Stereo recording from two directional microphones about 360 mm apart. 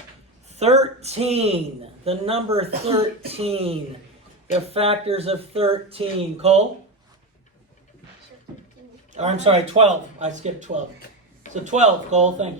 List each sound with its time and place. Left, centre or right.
0.5 s speech: centre
9.1 s speech: centre